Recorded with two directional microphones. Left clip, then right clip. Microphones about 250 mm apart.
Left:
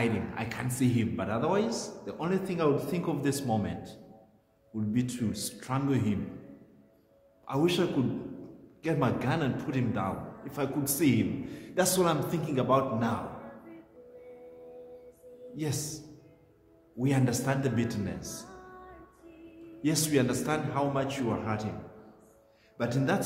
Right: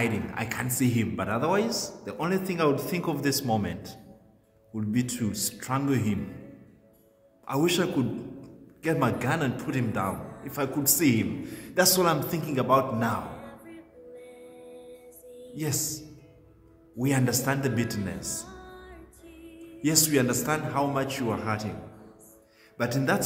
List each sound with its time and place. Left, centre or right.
0.0 s a man's voice: right
4.7 s a man's voice: right
7.4 s a man's voice: right
15.5 s a man's voice: right
17.0 s a man's voice: right
19.8 s a man's voice: right
22.8 s a man's voice: right